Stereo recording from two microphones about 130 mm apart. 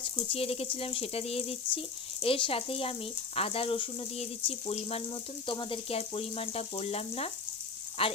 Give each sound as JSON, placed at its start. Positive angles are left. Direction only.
{"t": 0.0, "sound": "speech", "side_deg": 45}